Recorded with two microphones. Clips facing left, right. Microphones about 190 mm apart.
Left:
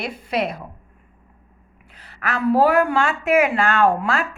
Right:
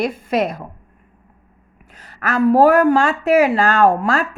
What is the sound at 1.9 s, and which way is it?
A woman's voice, 45° right (ahead or behind).